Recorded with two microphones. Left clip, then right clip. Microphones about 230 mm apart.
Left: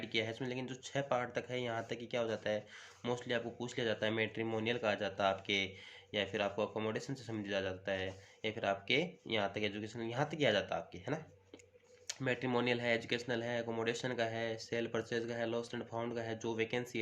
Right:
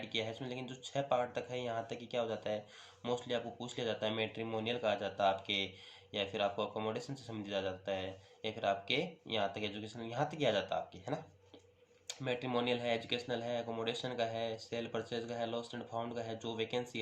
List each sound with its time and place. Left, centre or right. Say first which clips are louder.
0.0 s speech: left 2 dB; left